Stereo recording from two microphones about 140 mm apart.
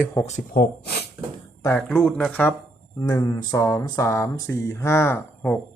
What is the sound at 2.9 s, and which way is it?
Speech, 25° left (ahead or behind).